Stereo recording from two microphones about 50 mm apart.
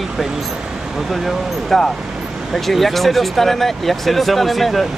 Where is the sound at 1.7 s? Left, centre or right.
Centre.